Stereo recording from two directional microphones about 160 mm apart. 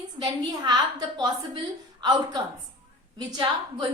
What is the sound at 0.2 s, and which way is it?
A woman's voice, 25° right (ahead or behind).